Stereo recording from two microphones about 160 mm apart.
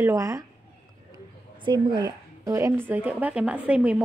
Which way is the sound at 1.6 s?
30° right (ahead or behind).